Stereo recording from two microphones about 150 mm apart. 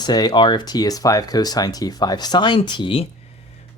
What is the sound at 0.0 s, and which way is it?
Speech, 30° left (ahead or behind).